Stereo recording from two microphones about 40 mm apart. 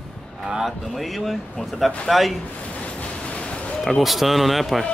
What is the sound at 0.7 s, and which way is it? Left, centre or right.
Speech, centre.